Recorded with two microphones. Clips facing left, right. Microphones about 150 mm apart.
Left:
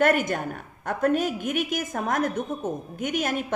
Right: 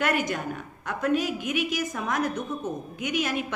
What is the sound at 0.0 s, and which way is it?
A woman's voice, 50° left (ahead or behind).